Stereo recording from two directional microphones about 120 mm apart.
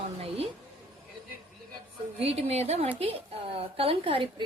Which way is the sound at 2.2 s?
60° right (ahead or behind).